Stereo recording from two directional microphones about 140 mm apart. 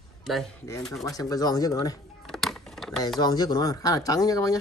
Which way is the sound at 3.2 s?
30° left (ahead or behind).